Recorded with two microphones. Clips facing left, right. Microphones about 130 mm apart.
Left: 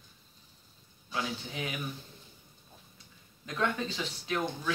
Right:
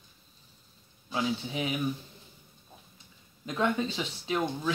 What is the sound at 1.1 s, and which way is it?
Speech, 15° right (ahead or behind).